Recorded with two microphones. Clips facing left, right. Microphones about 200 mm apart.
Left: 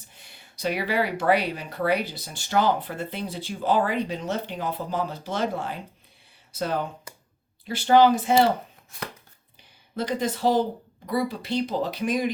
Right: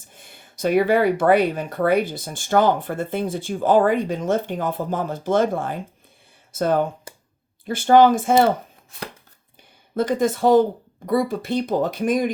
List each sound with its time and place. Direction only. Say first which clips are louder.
0.1 s speech: right 5 dB; 50° right (ahead or behind)
7.1 s a sound: right 3 dB; 30° right (ahead or behind)
7.6 s speech: right 4 dB; 50° right (ahead or behind)
9.9 s speech: right 7 dB; 50° right (ahead or behind)